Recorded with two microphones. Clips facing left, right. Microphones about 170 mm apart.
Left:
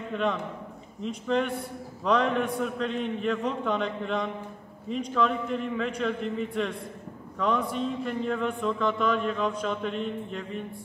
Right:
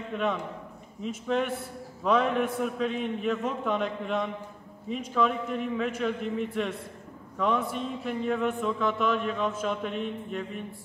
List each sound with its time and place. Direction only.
0.1 s a man's voice: 5° right (ahead or behind)